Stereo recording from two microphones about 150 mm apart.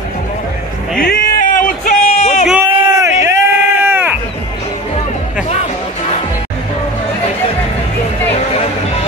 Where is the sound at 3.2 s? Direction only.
15° right (ahead or behind).